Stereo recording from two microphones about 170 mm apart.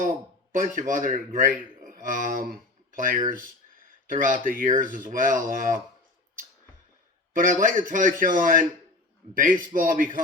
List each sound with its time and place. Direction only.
0.5 s a man's voice: 50° right (ahead or behind)
7.3 s a man's voice: 50° right (ahead or behind)